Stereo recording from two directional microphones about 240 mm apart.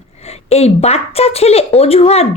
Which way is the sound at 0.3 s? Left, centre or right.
Left.